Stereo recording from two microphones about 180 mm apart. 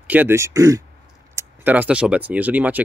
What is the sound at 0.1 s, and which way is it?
Speech, 10° right (ahead or behind).